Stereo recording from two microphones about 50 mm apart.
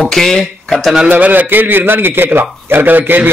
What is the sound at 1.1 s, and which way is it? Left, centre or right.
A man's voice, right.